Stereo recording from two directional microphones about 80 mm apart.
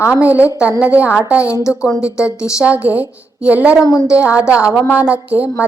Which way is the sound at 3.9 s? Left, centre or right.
Left.